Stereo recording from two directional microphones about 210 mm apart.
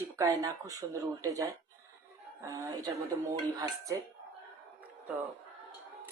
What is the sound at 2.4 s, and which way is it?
Speech, 15° right (ahead or behind).